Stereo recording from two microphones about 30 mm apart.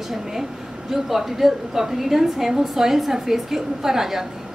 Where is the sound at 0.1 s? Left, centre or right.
Centre.